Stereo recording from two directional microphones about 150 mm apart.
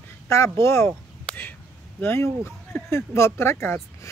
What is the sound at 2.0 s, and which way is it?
Speech, 15° left (ahead or behind).